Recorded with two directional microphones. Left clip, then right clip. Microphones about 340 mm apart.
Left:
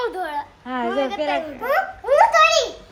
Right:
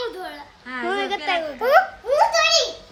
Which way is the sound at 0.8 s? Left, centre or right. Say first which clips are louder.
Left 1 dB; right.